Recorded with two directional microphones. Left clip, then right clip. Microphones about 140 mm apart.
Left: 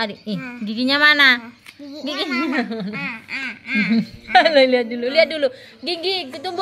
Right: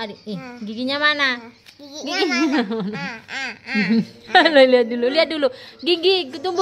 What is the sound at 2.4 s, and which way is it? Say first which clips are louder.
Speech: right 2 dB; 40° right (ahead or behind).